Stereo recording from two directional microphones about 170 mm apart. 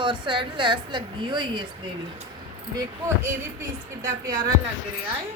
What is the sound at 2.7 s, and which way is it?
Speech, 20° right (ahead or behind).